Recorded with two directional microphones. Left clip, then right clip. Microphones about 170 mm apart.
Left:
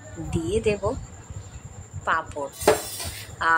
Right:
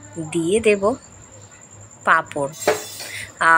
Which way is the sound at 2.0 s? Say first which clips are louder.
Right 8 dB; 20° right (ahead or behind).